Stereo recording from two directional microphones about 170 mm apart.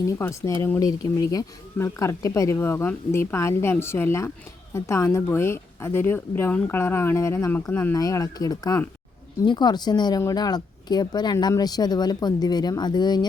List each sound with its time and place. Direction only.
0.1 s a woman's voice: 15° left (ahead or behind)